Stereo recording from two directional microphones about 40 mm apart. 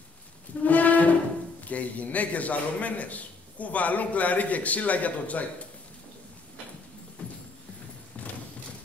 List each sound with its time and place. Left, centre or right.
0.7 s brass instrument: left
1.6 s a man's voice: left
7.2 s music: left